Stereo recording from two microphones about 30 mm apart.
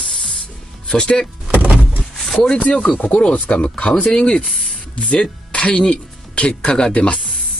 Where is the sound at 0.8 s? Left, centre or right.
Left.